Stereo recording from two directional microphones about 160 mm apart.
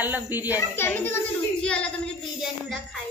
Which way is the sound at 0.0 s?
10° right (ahead or behind).